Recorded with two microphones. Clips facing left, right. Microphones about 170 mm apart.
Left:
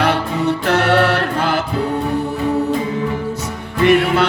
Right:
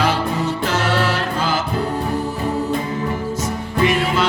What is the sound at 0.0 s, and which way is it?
Music, 60° left (ahead or behind).